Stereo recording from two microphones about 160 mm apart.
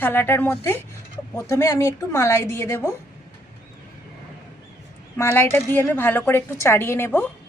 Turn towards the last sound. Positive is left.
turn(degrees=15)  # may be behind; listen again after turning